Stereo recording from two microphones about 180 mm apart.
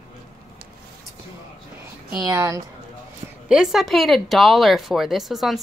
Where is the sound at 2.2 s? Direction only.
15° right (ahead or behind).